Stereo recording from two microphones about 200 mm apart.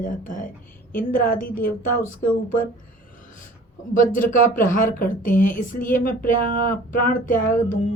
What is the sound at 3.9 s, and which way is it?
Speech, 40° left (ahead or behind).